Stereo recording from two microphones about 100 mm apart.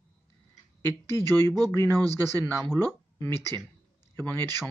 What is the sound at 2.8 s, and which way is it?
Speech, 35° right (ahead or behind).